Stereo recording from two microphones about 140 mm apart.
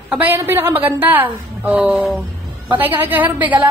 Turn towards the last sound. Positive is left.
turn(degrees=-10)  # may be behind; listen again after turning